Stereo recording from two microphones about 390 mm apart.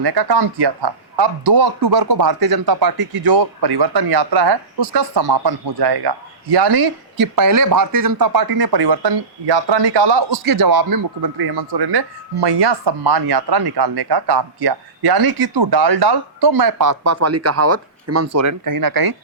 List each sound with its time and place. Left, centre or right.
0.0 s speech: right
3.2 s speech: right
7.3 s speech: right